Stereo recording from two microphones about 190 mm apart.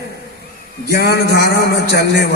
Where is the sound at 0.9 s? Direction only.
55° left (ahead or behind).